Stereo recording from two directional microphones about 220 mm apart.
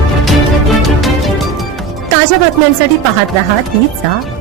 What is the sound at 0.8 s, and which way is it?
Music, centre (ahead or behind).